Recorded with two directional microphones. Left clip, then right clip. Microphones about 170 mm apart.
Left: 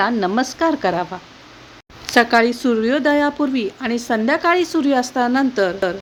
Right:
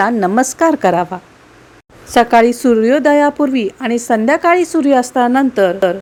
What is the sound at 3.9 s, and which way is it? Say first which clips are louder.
A woman's voice: right 6 dB; 40° right (ahead or behind).